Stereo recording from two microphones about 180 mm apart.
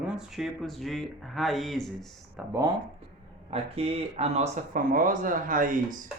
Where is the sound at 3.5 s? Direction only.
35° right (ahead or behind).